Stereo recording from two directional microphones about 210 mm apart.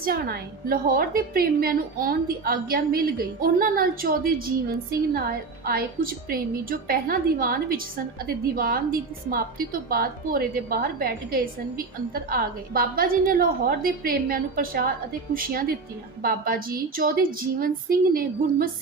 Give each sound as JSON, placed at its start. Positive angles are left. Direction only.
{"t": 0.0, "sound": "a woman's voice", "side_deg": -45}